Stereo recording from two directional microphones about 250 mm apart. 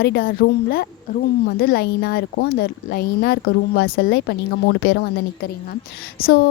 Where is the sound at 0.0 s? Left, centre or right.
Left.